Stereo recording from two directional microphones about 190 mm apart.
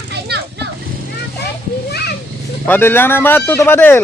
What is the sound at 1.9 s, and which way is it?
Children playing, 60° left (ahead or behind).